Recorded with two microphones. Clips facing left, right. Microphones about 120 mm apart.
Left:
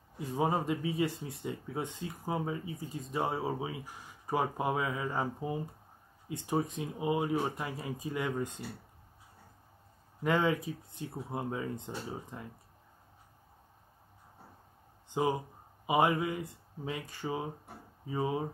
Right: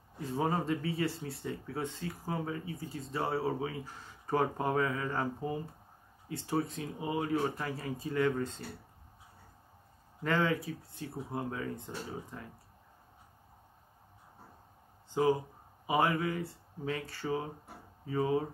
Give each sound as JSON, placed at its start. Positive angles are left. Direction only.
{"t": 0.4, "sound": "speech", "side_deg": 15}
{"t": 10.2, "sound": "speech", "side_deg": 15}
{"t": 15.0, "sound": "speech", "side_deg": 20}